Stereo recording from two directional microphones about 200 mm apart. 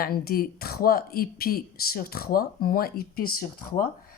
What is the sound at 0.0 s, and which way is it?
Speech, 50° left (ahead or behind).